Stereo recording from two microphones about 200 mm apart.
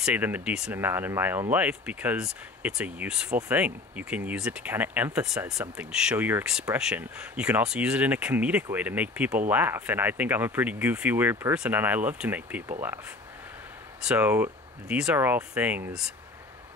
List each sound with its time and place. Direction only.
0.0 s speech: 10° right (ahead or behind)
14.0 s speech: 10° right (ahead or behind)